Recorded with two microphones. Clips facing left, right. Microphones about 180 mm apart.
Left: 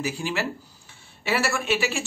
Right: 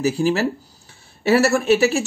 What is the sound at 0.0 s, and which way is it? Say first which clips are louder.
A man's voice: right 9 dB; 40° right (ahead or behind).